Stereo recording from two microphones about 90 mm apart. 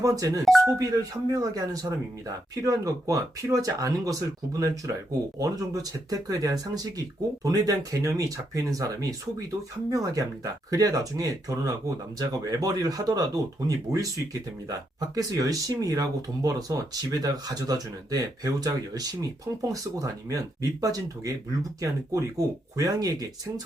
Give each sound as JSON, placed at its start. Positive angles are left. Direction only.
{"t": 0.0, "sound": "speech", "side_deg": -40}